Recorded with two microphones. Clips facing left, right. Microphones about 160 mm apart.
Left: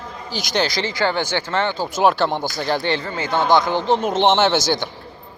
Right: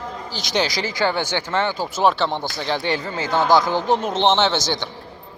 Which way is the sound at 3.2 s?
20° left (ahead or behind).